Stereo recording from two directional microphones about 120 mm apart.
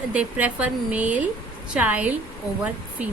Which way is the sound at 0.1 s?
10° right (ahead or behind).